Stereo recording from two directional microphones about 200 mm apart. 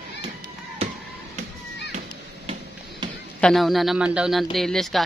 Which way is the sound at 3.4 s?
Centre (ahead or behind).